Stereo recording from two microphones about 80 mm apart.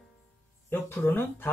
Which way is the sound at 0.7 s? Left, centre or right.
Left.